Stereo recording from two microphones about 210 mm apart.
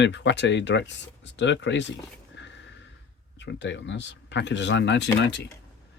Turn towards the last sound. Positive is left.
turn(degrees=55)  # may be behind; listen again after turning